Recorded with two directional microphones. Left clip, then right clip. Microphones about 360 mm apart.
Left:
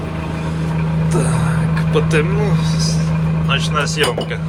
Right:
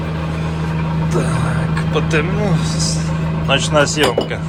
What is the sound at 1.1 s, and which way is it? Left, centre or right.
Vehicle, centre.